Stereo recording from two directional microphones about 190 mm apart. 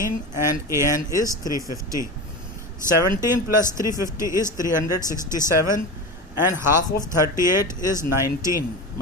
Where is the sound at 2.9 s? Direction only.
15° right (ahead or behind).